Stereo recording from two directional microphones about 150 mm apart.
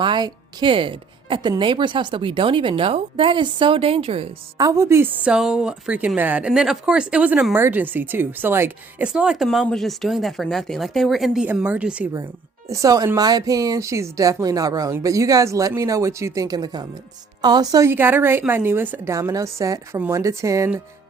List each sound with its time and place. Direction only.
0.0 s speech: 30° right (ahead or behind)
4.5 s a woman's voice: 20° right (ahead or behind)
12.6 s a woman's voice: 20° right (ahead or behind)